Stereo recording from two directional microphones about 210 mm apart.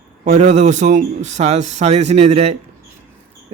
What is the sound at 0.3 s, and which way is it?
Speech, 30° right (ahead or behind).